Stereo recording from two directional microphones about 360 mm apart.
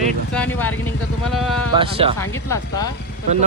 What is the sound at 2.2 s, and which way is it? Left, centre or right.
Speech, centre.